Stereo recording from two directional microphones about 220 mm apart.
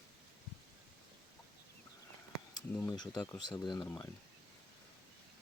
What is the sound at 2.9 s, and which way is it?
Speech, 15° left (ahead or behind).